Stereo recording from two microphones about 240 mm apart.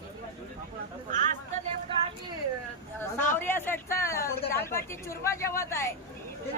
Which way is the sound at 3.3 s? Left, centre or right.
Centre.